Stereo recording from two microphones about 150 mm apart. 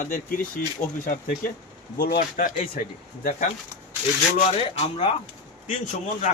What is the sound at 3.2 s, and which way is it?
Speech, 55° left (ahead or behind).